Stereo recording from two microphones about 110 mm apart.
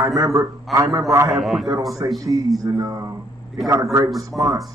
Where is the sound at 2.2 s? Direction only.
30° right (ahead or behind).